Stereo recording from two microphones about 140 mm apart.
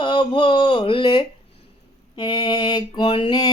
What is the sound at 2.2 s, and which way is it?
Mantra, 30° left (ahead or behind).